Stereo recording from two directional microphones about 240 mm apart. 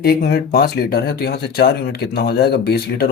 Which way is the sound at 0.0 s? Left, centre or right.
Left.